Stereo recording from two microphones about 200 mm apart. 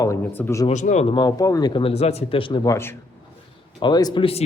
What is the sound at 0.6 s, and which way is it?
Speech, 35° left (ahead or behind).